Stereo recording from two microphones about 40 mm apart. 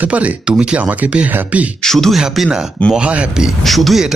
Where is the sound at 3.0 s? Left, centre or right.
Right.